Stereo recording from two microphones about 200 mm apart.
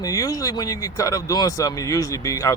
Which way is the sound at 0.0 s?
15° left (ahead or behind).